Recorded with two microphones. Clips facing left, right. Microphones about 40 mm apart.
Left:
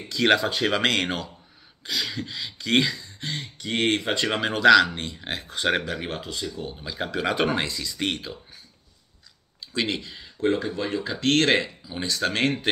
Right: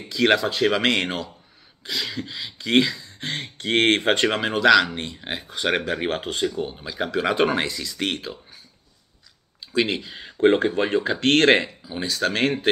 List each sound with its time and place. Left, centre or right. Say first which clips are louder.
0.1 s speech: right 1 dB; centre
3.3 s speech: right 4 dB; right
4.3 s speech: left 3 dB; centre
6.0 s speech: right 7 dB; right
6.6 s speech: right 4 dB; centre
9.7 s speech: right 4 dB; centre
10.1 s speech: right 8 dB; right
11.9 s speech: right 2 dB; centre